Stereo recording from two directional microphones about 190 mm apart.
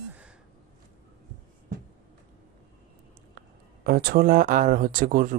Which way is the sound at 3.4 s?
55° right (ahead or behind).